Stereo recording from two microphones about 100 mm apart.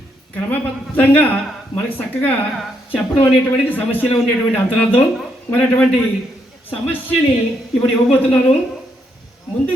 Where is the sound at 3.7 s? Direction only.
15° left (ahead or behind).